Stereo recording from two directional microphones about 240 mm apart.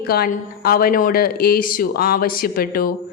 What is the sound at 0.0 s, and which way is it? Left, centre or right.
A woman's voice, left.